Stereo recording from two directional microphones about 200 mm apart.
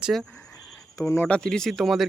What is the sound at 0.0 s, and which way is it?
Speech, centre (ahead or behind).